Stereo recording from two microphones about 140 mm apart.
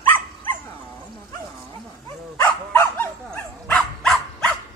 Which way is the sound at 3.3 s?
5° left (ahead or behind).